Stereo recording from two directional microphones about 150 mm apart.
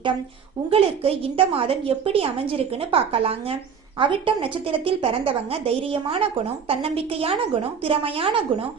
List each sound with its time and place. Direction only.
0.7 s a woman's voice: 40° right (ahead or behind)